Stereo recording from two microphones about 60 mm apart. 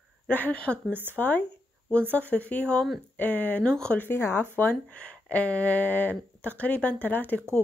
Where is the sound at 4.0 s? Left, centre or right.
Left.